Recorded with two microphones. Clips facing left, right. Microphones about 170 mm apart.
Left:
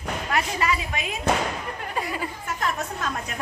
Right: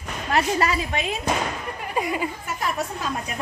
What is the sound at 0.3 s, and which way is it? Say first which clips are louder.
Speech: right 4 dB; 35° right (ahead or behind).